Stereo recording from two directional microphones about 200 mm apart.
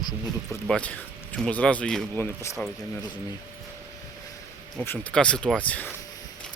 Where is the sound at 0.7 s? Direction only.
5° left (ahead or behind).